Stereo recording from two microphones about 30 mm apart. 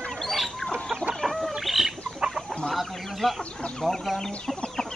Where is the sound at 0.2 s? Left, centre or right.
Centre.